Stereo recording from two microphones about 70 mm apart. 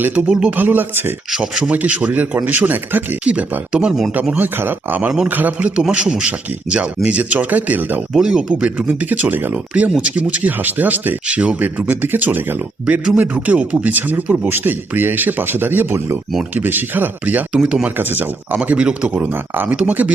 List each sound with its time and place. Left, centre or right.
0.0 s speech: right
0.6 s speech: right
1.3 s speech: centre; by 3.2 s right
3.2 s speech: centre
8.1 s speech: centre